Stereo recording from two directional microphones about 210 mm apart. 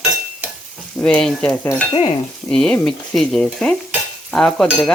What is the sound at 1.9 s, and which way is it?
Stir, 30° left (ahead or behind).